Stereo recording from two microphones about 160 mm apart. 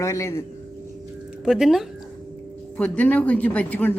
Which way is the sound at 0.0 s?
20° left (ahead or behind).